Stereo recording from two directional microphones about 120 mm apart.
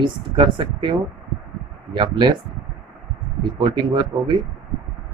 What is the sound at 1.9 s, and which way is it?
Speech, 40° right (ahead or behind).